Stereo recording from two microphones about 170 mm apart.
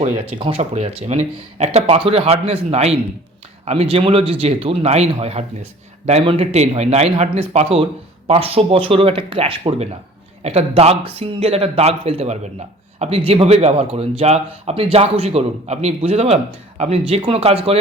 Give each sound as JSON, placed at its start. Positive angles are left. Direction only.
{"t": 0.3, "sound": "speech", "side_deg": -30}